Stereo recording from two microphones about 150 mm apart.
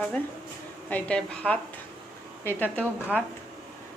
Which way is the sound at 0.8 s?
10° left (ahead or behind).